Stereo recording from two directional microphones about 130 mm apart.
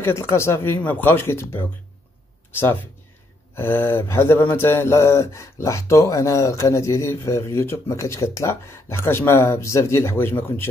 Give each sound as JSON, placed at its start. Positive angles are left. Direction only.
{"t": 0.0, "sound": "speech", "side_deg": 20}
{"t": 3.5, "sound": "speech", "side_deg": 15}